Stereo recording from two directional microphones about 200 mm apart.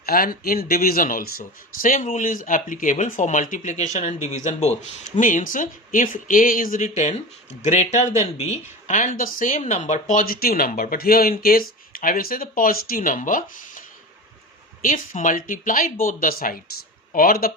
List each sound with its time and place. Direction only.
0.0 s speech: 45° left (ahead or behind)